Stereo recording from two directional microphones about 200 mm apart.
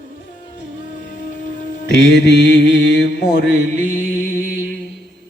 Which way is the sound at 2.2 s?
60° left (ahead or behind).